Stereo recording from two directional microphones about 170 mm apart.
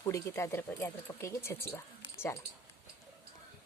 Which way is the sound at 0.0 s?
15° left (ahead or behind).